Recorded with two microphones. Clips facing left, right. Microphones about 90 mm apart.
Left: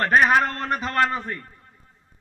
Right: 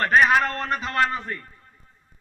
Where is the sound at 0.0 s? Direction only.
40° left (ahead or behind).